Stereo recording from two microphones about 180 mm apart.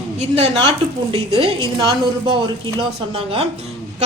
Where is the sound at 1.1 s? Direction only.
30° right (ahead or behind).